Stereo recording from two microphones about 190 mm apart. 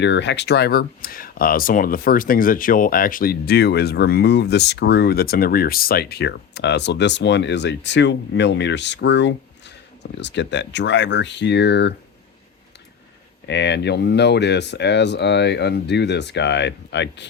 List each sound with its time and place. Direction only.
0.0 s speech: 70° left (ahead or behind)
13.5 s speech: 65° left (ahead or behind)